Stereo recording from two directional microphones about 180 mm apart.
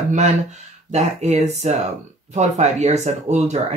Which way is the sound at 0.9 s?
40° right (ahead or behind).